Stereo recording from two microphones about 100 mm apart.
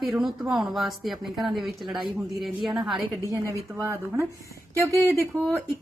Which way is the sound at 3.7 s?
30° right (ahead or behind).